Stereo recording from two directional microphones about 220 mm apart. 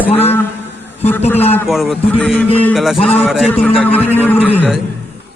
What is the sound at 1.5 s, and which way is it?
A man's voice, 5° left (ahead or behind).